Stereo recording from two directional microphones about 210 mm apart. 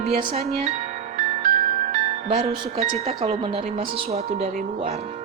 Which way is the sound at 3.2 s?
25° right (ahead or behind).